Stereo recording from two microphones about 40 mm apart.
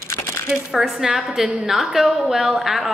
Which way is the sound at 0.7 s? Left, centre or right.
Centre.